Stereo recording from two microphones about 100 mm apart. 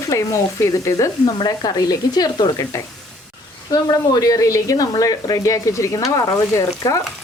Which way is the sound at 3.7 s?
40° left (ahead or behind).